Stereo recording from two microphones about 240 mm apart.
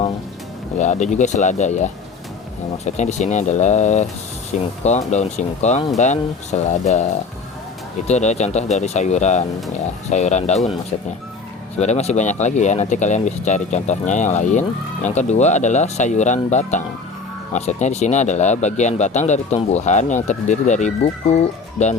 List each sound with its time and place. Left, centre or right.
0.8 s speech: left
11.8 s speech: left